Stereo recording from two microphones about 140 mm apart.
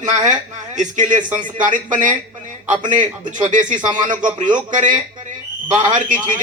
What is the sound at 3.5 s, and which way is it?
Speech, 65° right (ahead or behind).